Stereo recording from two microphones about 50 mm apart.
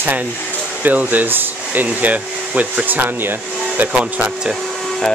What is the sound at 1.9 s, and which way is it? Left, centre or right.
Hair dryer, right.